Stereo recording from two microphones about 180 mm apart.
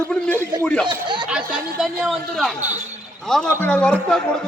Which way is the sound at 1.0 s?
25° right (ahead or behind).